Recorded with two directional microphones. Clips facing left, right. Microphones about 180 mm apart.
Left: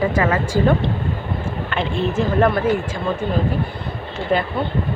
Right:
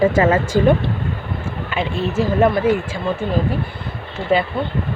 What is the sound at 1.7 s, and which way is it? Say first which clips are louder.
Speech: right 1 dB; 5° right (ahead or behind).